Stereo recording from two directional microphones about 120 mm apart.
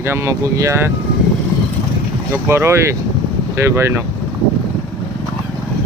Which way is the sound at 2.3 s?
20° right (ahead or behind).